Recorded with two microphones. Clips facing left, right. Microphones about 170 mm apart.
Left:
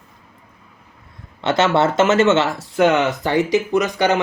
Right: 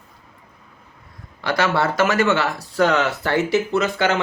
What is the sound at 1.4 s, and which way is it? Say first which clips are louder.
Speech: left 4 dB; 25° left (ahead or behind).